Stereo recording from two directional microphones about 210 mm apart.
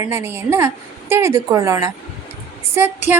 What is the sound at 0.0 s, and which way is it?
Speech, 10° right (ahead or behind).